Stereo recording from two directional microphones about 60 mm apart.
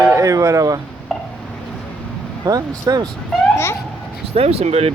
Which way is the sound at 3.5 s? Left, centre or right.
Left.